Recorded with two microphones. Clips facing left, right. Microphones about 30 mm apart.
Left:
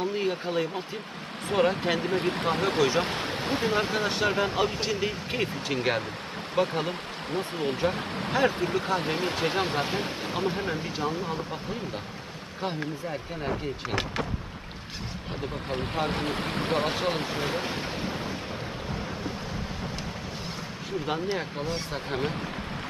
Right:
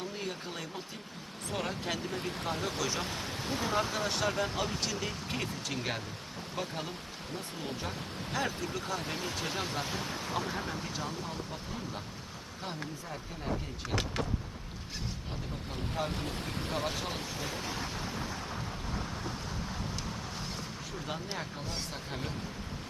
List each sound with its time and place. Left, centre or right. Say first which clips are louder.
0.0 s a sound: left 10 dB; left
1.5 s speech: left 11 dB; left
2.8 s speech: left 9 dB; left
7.3 s speech: left 11 dB; left
8.4 s speech: left 10 dB; left
15.7 s speech: left 7 dB; left
18.9 s boat: left 5 dB; centre
22.1 s speech: left 11 dB; left